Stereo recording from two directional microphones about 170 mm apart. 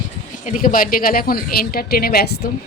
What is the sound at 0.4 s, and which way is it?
A woman's voice, 55° left (ahead or behind).